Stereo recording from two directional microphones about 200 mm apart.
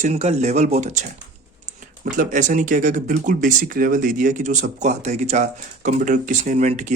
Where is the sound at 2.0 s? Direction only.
40° right (ahead or behind).